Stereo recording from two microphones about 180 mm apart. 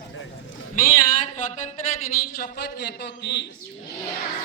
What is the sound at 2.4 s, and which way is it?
A man's voice, 65° left (ahead or behind).